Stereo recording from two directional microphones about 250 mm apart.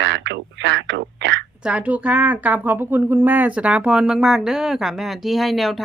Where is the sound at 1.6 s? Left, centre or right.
Centre.